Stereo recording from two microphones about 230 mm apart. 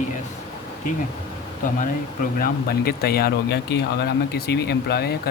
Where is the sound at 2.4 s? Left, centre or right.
Left.